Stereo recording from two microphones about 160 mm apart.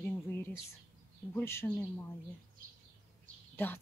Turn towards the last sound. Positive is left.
turn(degrees=15)  # may be behind; listen again after turning